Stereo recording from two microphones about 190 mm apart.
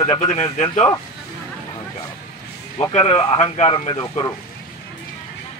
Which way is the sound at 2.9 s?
25° left (ahead or behind).